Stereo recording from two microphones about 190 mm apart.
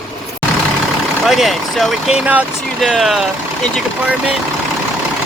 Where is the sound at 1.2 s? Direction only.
Centre (ahead or behind).